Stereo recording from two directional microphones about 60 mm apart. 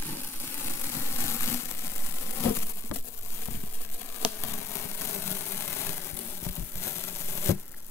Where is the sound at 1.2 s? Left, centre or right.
Left.